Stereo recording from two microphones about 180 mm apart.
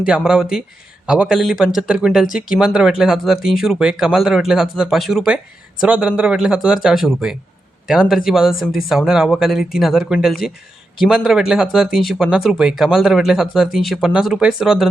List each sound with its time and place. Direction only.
0.0 s speech: 5° right (ahead or behind)